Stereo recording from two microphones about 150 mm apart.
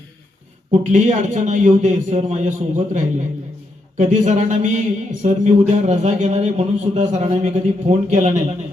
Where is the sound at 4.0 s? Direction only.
55° right (ahead or behind).